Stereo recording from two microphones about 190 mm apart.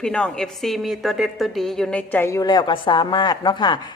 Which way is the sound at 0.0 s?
5° left (ahead or behind).